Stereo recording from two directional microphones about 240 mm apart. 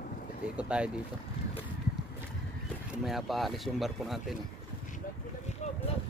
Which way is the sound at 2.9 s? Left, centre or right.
Centre.